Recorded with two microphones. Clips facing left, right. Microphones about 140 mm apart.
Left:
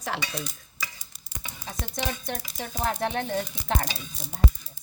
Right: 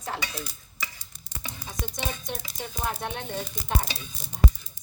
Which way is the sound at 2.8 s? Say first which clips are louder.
Left 5 dB; 65° left (ahead or behind).